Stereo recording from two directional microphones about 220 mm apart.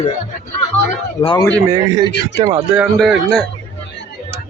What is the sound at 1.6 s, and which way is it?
Speech, 15° right (ahead or behind).